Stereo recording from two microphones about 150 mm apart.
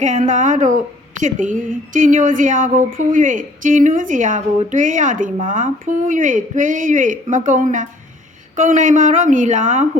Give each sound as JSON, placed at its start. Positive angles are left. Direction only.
{"t": 0.0, "sound": "a woman's voice", "side_deg": -55}